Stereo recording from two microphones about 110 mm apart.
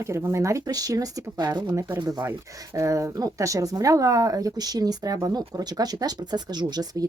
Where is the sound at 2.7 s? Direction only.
30° right (ahead or behind).